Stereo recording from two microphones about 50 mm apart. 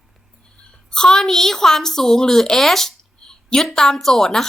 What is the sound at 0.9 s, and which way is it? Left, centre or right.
A woman's voice, centre.